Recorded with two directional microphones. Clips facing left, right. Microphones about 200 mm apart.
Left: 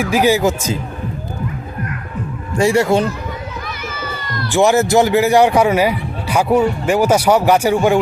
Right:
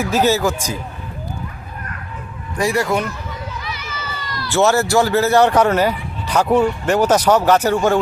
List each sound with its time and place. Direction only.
0.0 s a man's voice: 15° left (ahead or behind)
2.6 s speech: 25° left (ahead or behind)
3.6 s children playing: 50° left (ahead or behind)
4.5 s a man's voice: 15° left (ahead or behind)